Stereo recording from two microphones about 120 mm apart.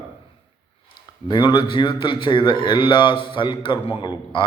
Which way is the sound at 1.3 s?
40° left (ahead or behind).